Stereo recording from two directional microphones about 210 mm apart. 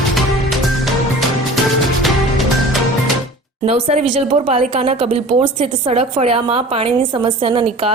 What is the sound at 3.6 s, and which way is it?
A woman's voice, 30° right (ahead or behind).